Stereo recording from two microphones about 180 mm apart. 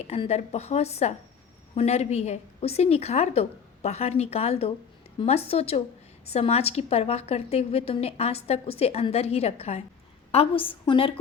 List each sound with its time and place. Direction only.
0.1 s a woman's voice: 35° left (ahead or behind)